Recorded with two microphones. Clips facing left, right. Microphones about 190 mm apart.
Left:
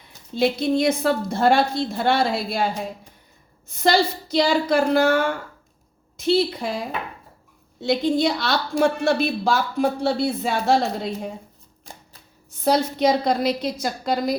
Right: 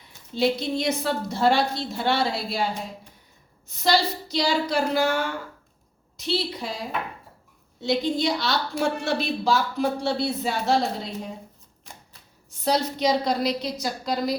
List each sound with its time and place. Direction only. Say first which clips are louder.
0.3 s a woman's voice: left 4 dB; 55° left (ahead or behind)
3.7 s a woman's voice: left 3 dB; 50° left (ahead or behind)
7.9 s a woman's voice: left 4 dB; 55° left (ahead or behind)
12.6 s a woman's voice: left 4 dB; 50° left (ahead or behind)